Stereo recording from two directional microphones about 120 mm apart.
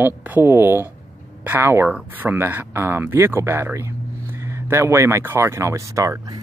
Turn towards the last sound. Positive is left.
turn(degrees=-25)  # may be behind; listen again after turning